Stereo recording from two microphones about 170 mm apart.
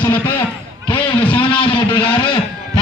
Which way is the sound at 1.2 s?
30° left (ahead or behind).